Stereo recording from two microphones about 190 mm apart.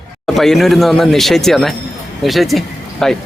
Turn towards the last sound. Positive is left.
turn(degrees=0)  # may be behind; listen again after turning